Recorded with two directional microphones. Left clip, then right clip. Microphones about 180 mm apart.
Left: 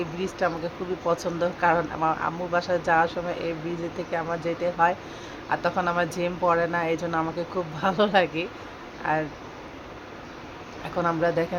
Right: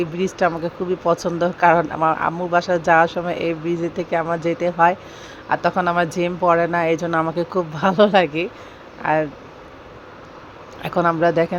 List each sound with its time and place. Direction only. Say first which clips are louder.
0.2 s speech: right 7 dB; 30° right (ahead or behind)
10.8 s speech: right 7 dB; 35° right (ahead or behind)